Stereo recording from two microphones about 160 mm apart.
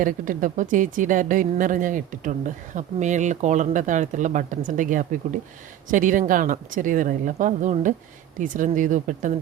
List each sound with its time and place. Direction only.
0.0 s a woman's voice: 55° right (ahead or behind)